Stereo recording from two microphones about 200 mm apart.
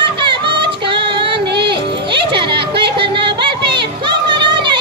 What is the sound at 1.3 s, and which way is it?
Music, 55° right (ahead or behind).